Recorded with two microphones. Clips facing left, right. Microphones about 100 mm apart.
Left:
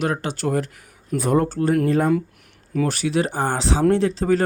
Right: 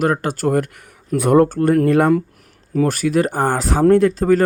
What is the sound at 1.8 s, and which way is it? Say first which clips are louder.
Speech: right 5 dB; 65° right (ahead or behind).